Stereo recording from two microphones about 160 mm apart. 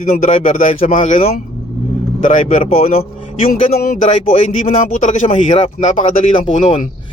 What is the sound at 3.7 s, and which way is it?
Speech, 70° left (ahead or behind).